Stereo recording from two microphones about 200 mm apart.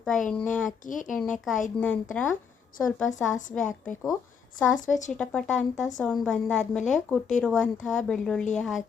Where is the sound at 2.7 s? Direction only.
45° left (ahead or behind).